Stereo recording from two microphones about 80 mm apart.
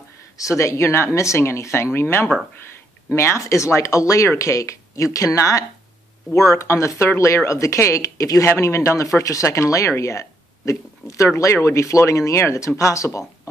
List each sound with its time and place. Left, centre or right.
0.4 s speech: left
3.2 s speech: left